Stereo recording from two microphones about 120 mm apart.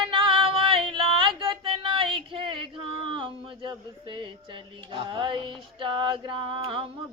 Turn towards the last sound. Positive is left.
turn(degrees=-45)  # may be behind; listen again after turning